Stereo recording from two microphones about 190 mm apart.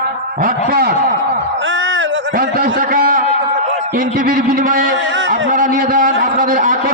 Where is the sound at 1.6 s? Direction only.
90° right.